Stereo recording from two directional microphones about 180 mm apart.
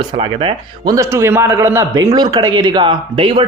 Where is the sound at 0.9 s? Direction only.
15° right (ahead or behind).